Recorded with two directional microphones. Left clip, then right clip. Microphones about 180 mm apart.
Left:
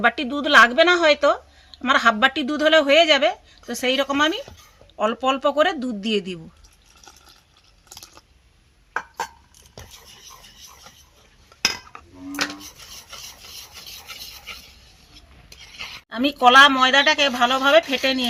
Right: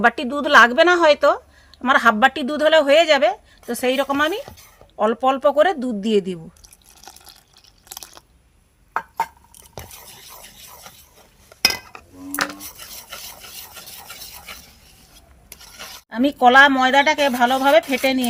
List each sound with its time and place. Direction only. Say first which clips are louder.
0.0 s speech: right 2 dB; 35° right (ahead or behind)
11.6 s cutlery: right 4 dB; 85° right
16.0 s speech: right 1 dB; 10° right (ahead or behind)